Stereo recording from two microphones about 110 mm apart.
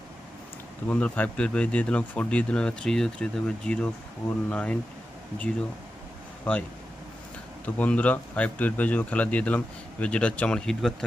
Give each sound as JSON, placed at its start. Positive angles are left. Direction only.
{"t": 0.9, "sound": "speech", "side_deg": 10}
{"t": 6.5, "sound": "speech", "side_deg": 10}